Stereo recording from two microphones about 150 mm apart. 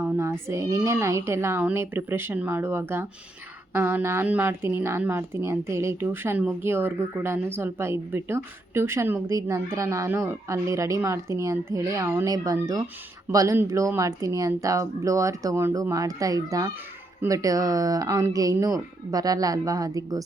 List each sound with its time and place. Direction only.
0.0 s speech: 20° right (ahead or behind)